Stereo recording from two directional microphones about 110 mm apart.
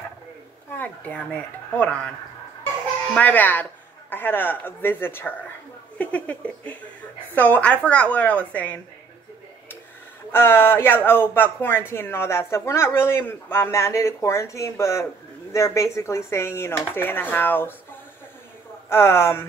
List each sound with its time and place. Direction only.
0.7 s speech: 15° left (ahead or behind)
3.2 s speech: 15° left (ahead or behind)
10.3 s speech: 20° left (ahead or behind)
18.9 s speech: 20° left (ahead or behind)